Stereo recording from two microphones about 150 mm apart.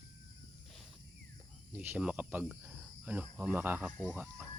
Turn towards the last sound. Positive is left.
turn(degrees=-10)  # may be behind; listen again after turning